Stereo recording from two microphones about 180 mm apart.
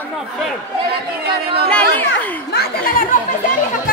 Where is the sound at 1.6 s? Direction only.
10° left (ahead or behind).